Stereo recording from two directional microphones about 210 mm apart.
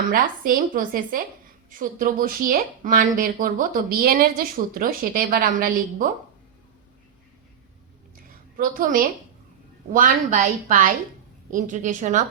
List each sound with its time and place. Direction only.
0.1 s a woman's voice: 40° right (ahead or behind)
8.1 s a sound: 40° right (ahead or behind)
9.9 s a woman's voice: 40° right (ahead or behind)